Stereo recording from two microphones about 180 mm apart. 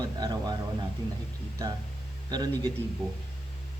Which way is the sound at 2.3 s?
25° right (ahead or behind).